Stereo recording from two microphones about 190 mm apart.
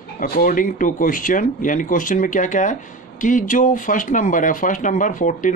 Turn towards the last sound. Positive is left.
turn(degrees=45)  # may be behind; listen again after turning